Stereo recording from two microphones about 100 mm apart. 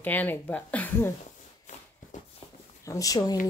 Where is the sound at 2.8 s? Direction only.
35° left (ahead or behind).